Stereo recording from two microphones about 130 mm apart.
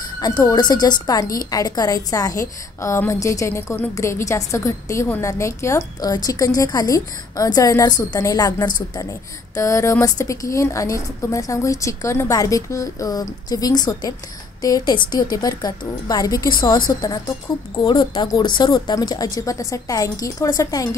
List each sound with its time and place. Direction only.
0.2 s a woman's voice: 30° left (ahead or behind)
9.6 s a woman's voice: 25° left (ahead or behind)